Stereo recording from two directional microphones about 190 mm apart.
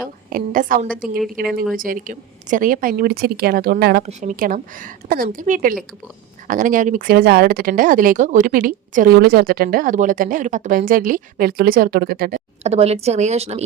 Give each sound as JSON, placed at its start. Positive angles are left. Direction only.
{"t": 0.0, "sound": "speech", "side_deg": -50}
{"t": 4.0, "sound": "speech", "side_deg": -40}
{"t": 12.6, "sound": "a woman's voice", "side_deg": -35}